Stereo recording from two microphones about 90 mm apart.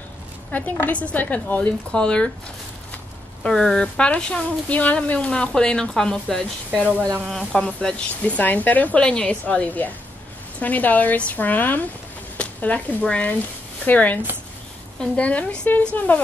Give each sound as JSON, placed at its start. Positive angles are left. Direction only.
{"t": 0.5, "sound": "speech", "side_deg": 20}
{"t": 3.4, "sound": "speech", "side_deg": 5}
{"t": 6.7, "sound": "speech", "side_deg": -15}
{"t": 7.2, "sound": "speech", "side_deg": 5}
{"t": 8.4, "sound": "speech", "side_deg": 20}